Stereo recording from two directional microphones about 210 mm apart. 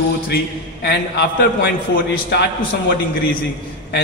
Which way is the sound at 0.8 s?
50° left (ahead or behind).